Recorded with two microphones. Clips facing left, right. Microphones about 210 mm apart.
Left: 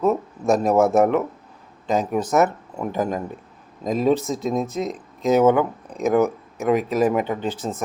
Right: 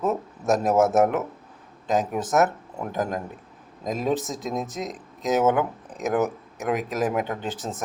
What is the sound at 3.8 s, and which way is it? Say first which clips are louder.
Speech: left 6 dB; centre (ahead or behind).